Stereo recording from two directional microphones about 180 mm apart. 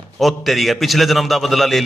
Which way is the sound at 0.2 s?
Centre (ahead or behind).